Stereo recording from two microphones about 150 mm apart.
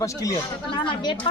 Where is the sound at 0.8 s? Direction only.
35° left (ahead or behind).